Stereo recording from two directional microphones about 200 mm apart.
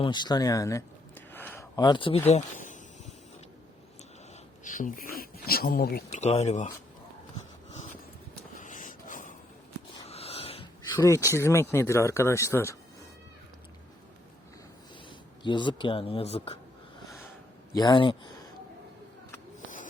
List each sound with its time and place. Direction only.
0.0 s speech: 20° left (ahead or behind)
4.6 s speech: 40° left (ahead or behind)
6.1 s speech: 35° left (ahead or behind)
8.5 s a sound: 40° left (ahead or behind)
10.1 s snort: 30° left (ahead or behind)
10.9 s speech: 15° left (ahead or behind)
15.4 s speech: 25° left (ahead or behind)
17.1 s a sound: 10° left (ahead or behind)
17.7 s speech: 20° left (ahead or behind)